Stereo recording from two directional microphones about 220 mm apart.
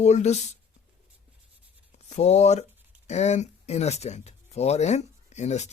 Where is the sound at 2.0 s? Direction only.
30° left (ahead or behind).